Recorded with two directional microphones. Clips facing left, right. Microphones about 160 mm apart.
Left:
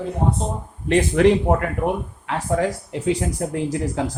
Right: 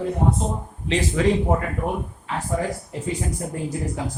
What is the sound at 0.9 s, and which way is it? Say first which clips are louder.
Speech: left 5 dB; 60° left (ahead or behind).